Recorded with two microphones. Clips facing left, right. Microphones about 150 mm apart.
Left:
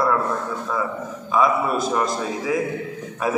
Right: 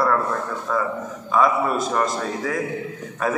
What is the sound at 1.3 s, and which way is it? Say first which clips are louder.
Speech: even; 5° left (ahead or behind).